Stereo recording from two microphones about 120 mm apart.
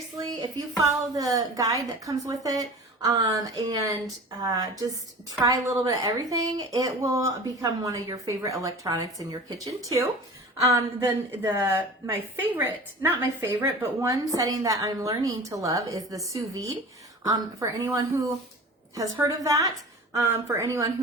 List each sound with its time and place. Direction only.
0.4 s a woman's voice: 30° right (ahead or behind)